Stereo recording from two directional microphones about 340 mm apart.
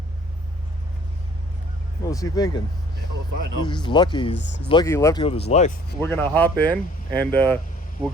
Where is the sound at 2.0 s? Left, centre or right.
Centre.